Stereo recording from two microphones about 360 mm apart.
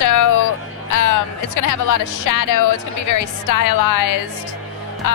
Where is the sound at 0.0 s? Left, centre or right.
Left.